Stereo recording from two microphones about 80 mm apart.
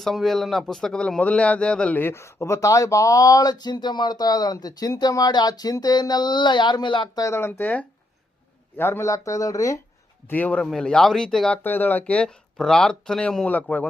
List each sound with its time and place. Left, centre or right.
0.0 s speech: centre
2.0 s speech: left
7.2 s speech: left
9.0 s speech: left
10.2 s a man's voice: left
10.6 s speech: centre
11.5 s speech: left